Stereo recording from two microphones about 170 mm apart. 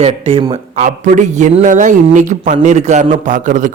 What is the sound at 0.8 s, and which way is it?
Speech, 45° right (ahead or behind).